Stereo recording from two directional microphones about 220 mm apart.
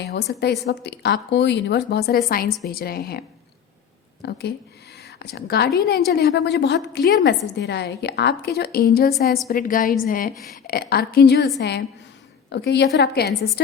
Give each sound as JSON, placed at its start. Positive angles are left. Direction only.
{"t": 0.0, "sound": "a woman's voice", "side_deg": 50}
{"t": 10.3, "sound": "a woman's voice", "side_deg": 0}
{"t": 10.7, "sound": "a woman's voice", "side_deg": 45}